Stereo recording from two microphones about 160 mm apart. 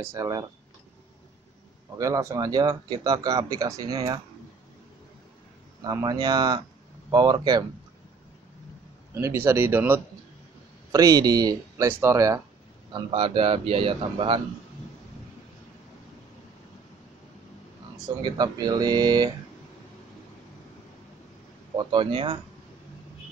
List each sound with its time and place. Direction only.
0.0 s speech: 20° right (ahead or behind)
2.0 s speech: 20° right (ahead or behind)
5.9 s speech: 25° right (ahead or behind)
9.1 s speech: 15° right (ahead or behind)
10.9 s speech: 20° right (ahead or behind)
12.9 s speech: 35° right (ahead or behind)
18.0 s speech: 25° right (ahead or behind)
21.7 s speech: 30° right (ahead or behind)